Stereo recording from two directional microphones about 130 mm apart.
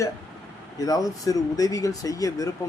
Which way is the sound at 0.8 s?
30° left (ahead or behind).